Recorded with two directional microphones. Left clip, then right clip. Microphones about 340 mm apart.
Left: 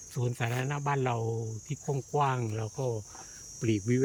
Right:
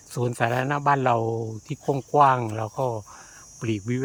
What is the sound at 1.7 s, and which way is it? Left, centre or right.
Speech, centre.